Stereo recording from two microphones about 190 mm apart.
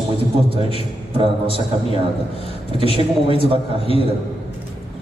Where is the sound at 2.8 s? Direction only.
30° right (ahead or behind).